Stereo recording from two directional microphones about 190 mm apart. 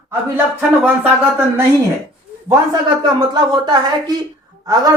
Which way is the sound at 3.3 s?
25° right (ahead or behind).